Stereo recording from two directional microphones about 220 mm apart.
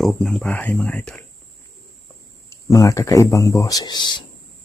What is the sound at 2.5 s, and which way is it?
Speech, 15° left (ahead or behind).